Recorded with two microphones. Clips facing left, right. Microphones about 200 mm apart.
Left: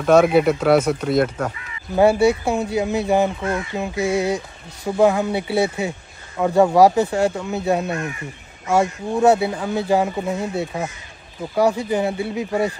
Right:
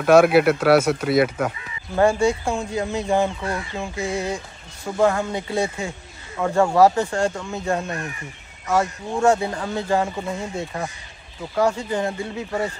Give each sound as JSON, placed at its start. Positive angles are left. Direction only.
{"t": 0.0, "sound": "speech", "side_deg": -5}
{"t": 2.0, "sound": "speech", "side_deg": 10}